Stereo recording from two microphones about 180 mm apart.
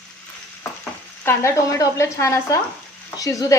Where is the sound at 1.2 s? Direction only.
15° left (ahead or behind).